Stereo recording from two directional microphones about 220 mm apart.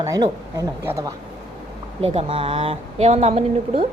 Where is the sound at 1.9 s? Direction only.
25° right (ahead or behind).